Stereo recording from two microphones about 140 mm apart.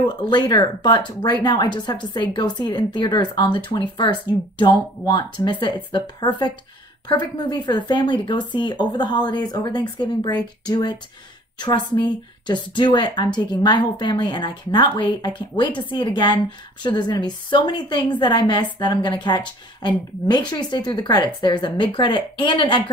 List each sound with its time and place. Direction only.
0.0 s a woman's voice: 30° left (ahead or behind)